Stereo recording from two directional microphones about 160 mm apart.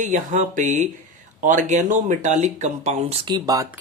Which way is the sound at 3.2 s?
25° right (ahead or behind).